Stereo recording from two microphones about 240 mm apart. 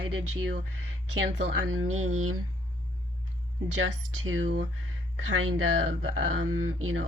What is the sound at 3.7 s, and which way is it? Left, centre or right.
Speech, right.